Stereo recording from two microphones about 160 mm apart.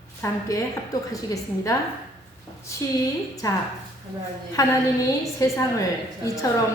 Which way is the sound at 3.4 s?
20° left (ahead or behind).